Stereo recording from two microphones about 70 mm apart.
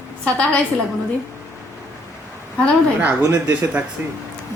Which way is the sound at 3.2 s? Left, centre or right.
Right.